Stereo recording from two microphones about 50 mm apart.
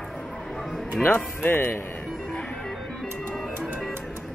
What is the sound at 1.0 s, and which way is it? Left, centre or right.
Speech, left.